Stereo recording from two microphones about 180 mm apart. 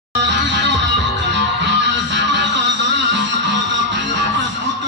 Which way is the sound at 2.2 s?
80° right.